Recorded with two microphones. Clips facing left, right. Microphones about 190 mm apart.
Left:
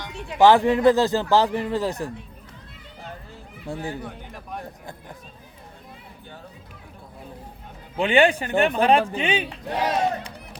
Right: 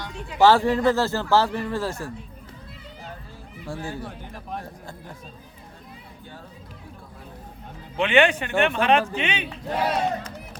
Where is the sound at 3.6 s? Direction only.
20° left (ahead or behind).